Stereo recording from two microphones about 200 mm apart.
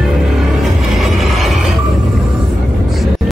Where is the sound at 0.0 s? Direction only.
Centre (ahead or behind).